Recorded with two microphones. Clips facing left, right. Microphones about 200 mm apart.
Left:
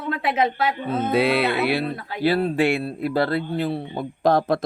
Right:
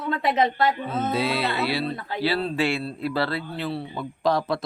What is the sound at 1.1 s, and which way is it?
Music, 60° left (ahead or behind).